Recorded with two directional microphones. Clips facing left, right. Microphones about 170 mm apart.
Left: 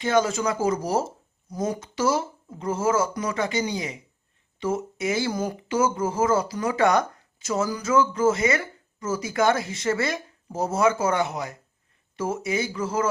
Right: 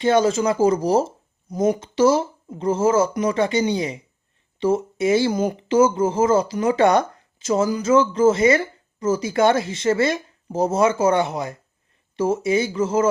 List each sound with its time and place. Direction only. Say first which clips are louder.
0.0 s speech: right 5 dB; 25° right (ahead or behind)